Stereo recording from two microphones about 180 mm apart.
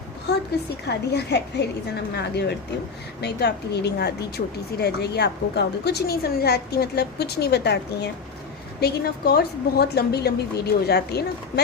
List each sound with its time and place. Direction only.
0.3 s a woman's voice: 65° left (ahead or behind)